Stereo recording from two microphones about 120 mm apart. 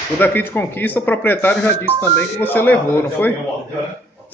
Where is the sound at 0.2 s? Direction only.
15° left (ahead or behind).